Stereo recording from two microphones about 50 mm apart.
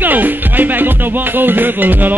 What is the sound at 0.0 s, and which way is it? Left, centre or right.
Music, right.